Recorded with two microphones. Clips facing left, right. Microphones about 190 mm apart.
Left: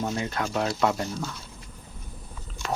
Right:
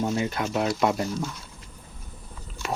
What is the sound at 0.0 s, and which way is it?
Speech, 15° right (ahead or behind).